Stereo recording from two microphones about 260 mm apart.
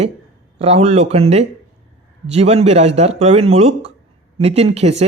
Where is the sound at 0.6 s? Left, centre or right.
Right.